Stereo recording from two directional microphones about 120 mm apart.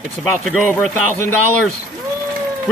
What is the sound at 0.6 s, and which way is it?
Speech, 10° left (ahead or behind).